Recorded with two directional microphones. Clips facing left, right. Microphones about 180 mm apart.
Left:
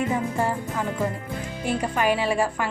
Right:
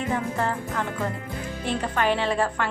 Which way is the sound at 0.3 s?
10° left (ahead or behind).